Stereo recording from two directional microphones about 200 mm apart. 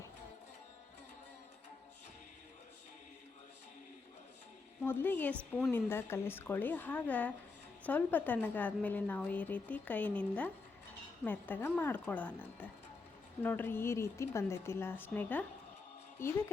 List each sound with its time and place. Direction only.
4.8 s a woman's voice: 10° left (ahead or behind)